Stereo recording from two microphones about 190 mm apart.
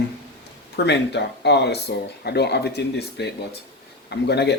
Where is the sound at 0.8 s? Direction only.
65° left (ahead or behind).